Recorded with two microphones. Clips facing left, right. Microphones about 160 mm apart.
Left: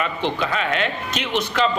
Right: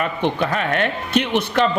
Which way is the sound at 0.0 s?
50° right (ahead or behind).